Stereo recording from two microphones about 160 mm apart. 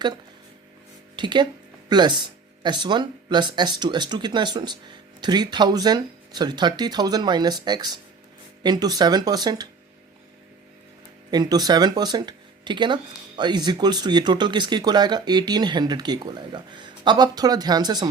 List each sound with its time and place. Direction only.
1.1 s speech: 30° right (ahead or behind)
11.3 s speech: 25° right (ahead or behind)